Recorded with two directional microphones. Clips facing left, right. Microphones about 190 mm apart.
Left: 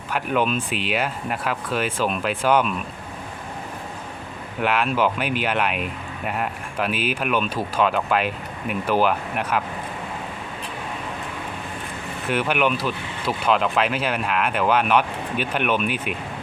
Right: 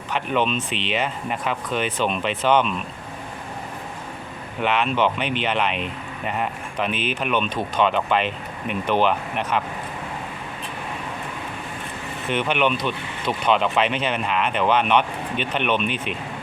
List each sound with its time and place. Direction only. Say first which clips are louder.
0.1 s speech: even; 5° left (ahead or behind)
4.6 s speech: even; 5° left (ahead or behind)
12.3 s speech: even; 5° left (ahead or behind)